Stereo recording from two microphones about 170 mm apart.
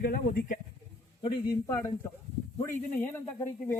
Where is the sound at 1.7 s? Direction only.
20° left (ahead or behind).